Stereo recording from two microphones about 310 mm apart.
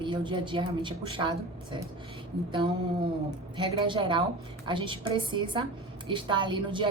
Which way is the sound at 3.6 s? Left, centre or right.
Centre.